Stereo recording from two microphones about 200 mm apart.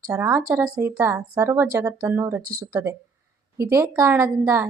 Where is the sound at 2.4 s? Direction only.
45° right (ahead or behind).